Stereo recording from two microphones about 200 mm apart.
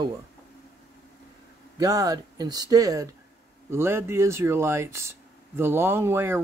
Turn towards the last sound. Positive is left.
turn(degrees=-10)  # may be behind; listen again after turning